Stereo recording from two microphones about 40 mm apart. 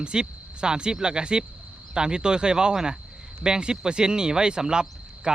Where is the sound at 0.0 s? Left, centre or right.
Right.